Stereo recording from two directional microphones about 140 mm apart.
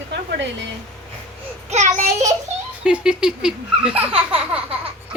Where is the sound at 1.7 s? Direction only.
55° right (ahead or behind).